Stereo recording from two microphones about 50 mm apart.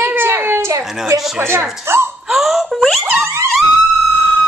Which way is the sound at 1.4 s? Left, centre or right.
Right.